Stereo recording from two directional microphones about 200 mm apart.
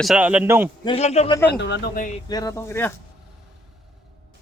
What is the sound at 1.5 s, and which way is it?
Speech, 60° left (ahead or behind).